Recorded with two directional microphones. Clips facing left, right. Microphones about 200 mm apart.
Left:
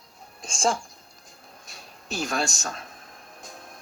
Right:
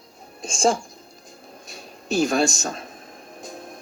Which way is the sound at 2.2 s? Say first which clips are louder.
Right 8 dB; 25° right (ahead or behind).